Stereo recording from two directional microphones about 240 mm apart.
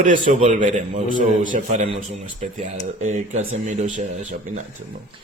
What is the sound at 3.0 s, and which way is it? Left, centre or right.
Speech, right.